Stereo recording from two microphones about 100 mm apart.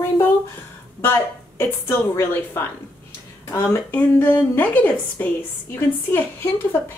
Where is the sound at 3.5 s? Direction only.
25° left (ahead or behind).